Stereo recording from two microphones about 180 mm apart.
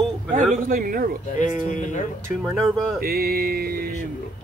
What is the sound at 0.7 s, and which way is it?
Speech, 50° right (ahead or behind).